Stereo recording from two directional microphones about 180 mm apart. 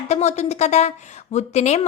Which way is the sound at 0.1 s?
40° left (ahead or behind).